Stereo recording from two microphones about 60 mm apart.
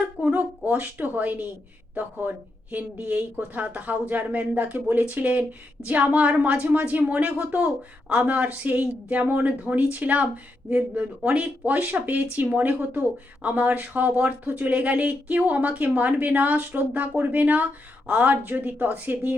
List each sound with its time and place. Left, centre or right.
0.2 s speech: right
3.1 s speech: right